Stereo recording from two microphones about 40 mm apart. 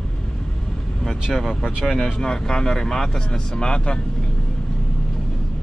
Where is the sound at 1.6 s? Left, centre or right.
Centre.